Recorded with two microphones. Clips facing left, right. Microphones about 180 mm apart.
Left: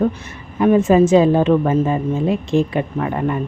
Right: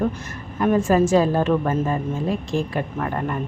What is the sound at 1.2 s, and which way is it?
A woman's voice, 20° left (ahead or behind).